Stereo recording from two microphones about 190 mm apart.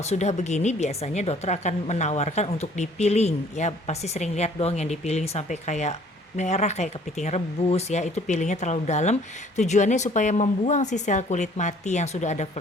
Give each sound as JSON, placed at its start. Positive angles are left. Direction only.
{"t": 0.0, "sound": "a woman's voice", "side_deg": 35}